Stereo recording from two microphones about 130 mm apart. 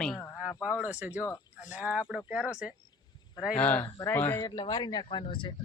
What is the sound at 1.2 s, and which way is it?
Speech, 25° left (ahead or behind).